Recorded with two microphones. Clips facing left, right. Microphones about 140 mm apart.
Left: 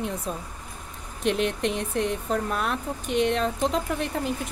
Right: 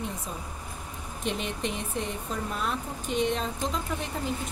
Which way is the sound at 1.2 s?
70° left (ahead or behind).